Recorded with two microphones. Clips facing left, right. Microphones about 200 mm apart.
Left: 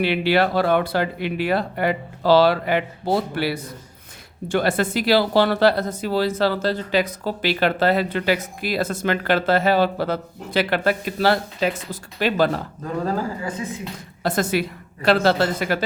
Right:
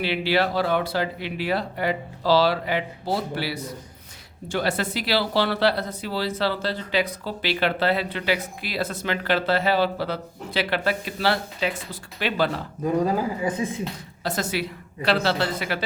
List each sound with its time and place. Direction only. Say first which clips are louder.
0.0 s speech: left 4 dB; 55° left (ahead or behind)
12.8 s speech: right 4 dB; 15° right (ahead or behind)
14.3 s speech: left 5 dB; 55° left (ahead or behind)